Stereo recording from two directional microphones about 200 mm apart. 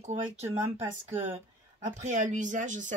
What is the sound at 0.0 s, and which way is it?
Speech, 35° right (ahead or behind).